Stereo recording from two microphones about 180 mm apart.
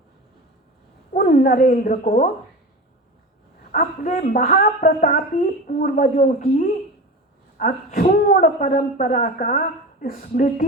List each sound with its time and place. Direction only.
1.1 s a woman's voice: 50° left (ahead or behind)
3.7 s a woman's voice: 45° left (ahead or behind)